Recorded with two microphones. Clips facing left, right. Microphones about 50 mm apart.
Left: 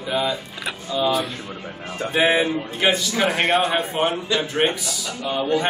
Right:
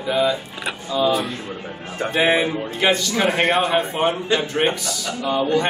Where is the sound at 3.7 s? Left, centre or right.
Centre.